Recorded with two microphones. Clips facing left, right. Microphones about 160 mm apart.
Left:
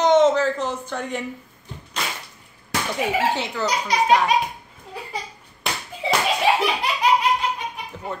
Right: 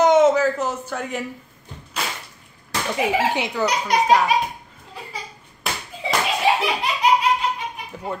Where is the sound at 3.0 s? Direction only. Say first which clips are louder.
Right 2 dB; 15° right (ahead or behind).